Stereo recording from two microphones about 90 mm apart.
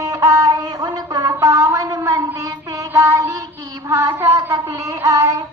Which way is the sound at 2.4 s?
40° right (ahead or behind).